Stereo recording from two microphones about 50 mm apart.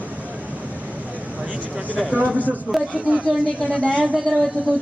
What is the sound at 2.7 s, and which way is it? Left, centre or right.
Speech, centre.